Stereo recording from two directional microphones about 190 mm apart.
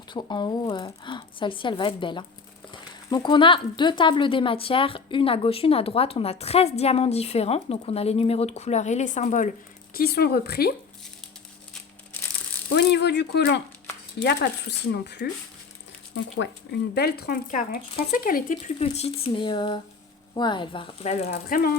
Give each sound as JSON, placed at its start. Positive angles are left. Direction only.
{"t": 0.1, "sound": "a woman's voice", "side_deg": 25}
{"t": 12.6, "sound": "speech", "side_deg": 65}
{"t": 18.8, "sound": "a woman's voice", "side_deg": 35}
{"t": 21.3, "sound": "speech", "side_deg": 50}